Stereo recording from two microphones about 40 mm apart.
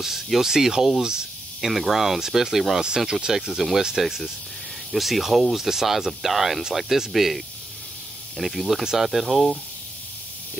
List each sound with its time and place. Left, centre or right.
0.0 s speech: centre
3.1 s speech: centre
3.3 s speech: centre
4.9 s speech: centre